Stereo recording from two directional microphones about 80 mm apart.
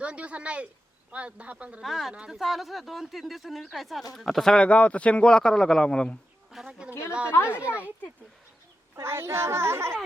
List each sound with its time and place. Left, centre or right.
0.0 s a man's voice: centre
1.8 s speech: centre
6.5 s a woman's voice: centre
7.4 s a man's voice: centre
9.0 s a child's voice: right